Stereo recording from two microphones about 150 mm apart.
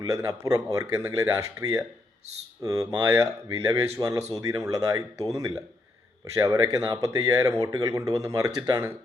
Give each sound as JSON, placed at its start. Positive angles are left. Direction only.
{"t": 0.0, "sound": "speech", "side_deg": -20}